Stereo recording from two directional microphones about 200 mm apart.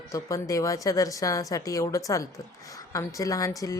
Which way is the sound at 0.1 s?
15° left (ahead or behind).